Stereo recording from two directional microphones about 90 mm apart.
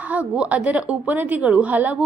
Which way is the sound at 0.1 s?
15° right (ahead or behind).